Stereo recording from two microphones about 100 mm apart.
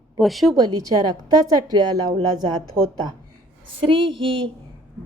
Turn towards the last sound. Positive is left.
turn(degrees=-60)  # may be behind; listen again after turning